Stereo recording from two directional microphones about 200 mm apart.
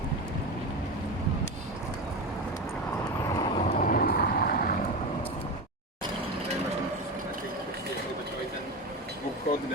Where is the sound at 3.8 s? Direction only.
45° left (ahead or behind).